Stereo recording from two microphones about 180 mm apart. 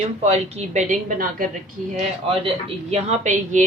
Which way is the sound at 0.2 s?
35° right (ahead or behind).